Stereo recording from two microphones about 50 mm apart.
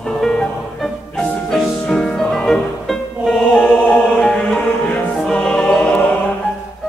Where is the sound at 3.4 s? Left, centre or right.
Centre.